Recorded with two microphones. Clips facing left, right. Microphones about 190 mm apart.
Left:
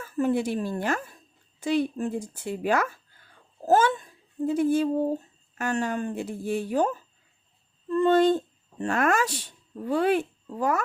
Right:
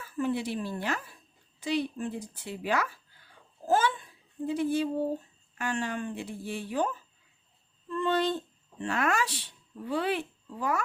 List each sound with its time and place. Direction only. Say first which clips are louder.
0.0 s speech: left 5 dB; 45° left (ahead or behind)